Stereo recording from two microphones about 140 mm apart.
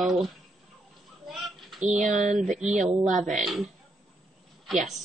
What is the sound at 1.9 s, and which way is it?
Speech, 60° right (ahead or behind).